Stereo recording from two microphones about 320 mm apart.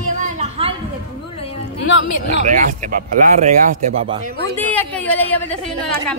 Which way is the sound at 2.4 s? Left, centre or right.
Right.